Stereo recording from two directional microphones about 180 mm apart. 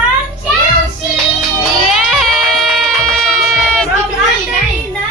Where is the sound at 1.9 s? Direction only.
Centre (ahead or behind).